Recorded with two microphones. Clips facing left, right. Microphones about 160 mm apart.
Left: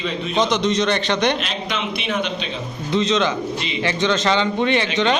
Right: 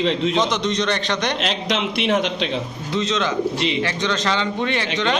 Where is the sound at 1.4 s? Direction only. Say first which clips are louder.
Right 3 dB; 90° right.